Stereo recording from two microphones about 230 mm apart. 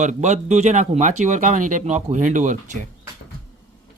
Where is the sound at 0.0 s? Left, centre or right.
Right.